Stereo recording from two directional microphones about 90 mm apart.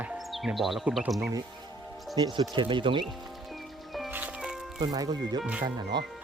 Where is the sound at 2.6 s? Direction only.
65° right (ahead or behind).